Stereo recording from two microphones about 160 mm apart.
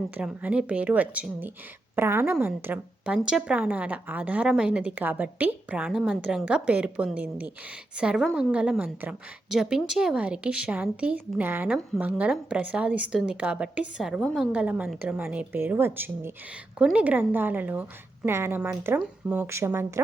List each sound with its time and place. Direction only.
0.2 s a woman's voice: 10° right (ahead or behind)